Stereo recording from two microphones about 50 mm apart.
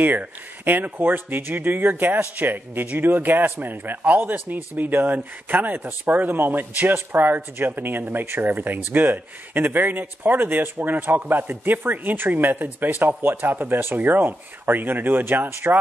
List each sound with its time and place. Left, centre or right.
0.0 s speech: right